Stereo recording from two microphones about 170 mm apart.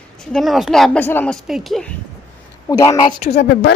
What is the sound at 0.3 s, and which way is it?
A woman's voice, centre (ahead or behind).